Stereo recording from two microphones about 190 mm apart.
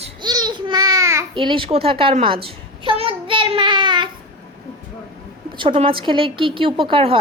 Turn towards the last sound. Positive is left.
turn(degrees=-30)  # may be behind; listen again after turning